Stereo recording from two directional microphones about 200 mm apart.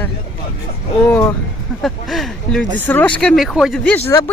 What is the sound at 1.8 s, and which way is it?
Speech, centre (ahead or behind).